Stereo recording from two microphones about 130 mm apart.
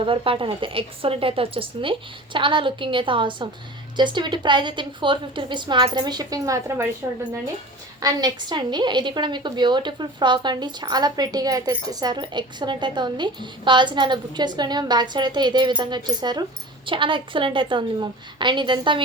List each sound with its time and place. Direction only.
0.0 s a woman's voice: 45° right (ahead or behind); by 6.9 s 20° right (ahead or behind)
8.0 s a woman's voice: 35° right (ahead or behind)